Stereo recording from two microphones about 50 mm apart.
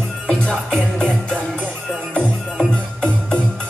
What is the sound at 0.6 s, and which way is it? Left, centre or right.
Music, centre.